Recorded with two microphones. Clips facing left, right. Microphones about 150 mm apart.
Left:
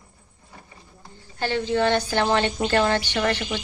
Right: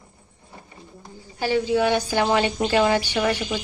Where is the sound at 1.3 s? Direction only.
10° right (ahead or behind).